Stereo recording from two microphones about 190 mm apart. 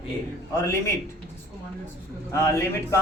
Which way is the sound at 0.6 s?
15° left (ahead or behind).